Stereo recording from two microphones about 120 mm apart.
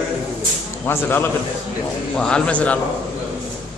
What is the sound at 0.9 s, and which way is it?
A man's voice, 20° left (ahead or behind).